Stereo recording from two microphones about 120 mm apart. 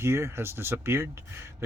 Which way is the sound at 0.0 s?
20° right (ahead or behind).